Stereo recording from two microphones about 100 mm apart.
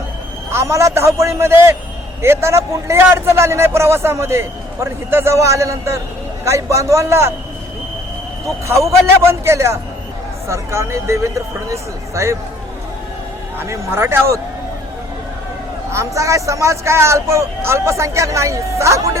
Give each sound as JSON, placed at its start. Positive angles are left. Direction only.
{"t": 0.5, "sound": "a man's voice", "side_deg": -30}
{"t": 8.4, "sound": "a man's voice", "side_deg": -30}
{"t": 13.6, "sound": "a man's voice", "side_deg": -25}
{"t": 15.9, "sound": "a man's voice", "side_deg": -30}